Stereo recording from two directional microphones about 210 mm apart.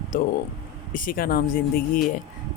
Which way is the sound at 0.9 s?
40° left (ahead or behind).